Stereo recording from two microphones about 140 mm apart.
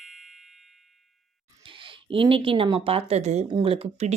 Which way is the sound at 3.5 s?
40° right (ahead or behind).